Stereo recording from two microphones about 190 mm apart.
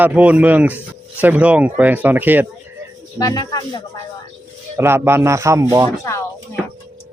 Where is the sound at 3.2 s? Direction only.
20° left (ahead or behind).